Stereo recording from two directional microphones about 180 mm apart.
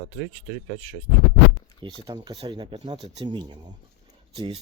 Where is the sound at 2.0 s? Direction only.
20° right (ahead or behind).